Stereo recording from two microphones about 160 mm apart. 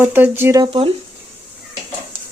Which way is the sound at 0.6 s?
35° right (ahead or behind).